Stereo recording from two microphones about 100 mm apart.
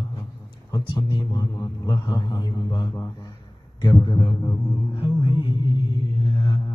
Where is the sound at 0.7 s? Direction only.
40° left (ahead or behind).